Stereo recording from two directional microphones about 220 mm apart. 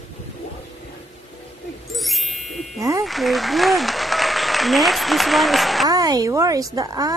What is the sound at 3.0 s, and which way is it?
Applause, centre (ahead or behind).